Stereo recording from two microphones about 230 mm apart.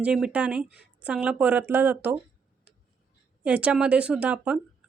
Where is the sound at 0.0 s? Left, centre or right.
Centre.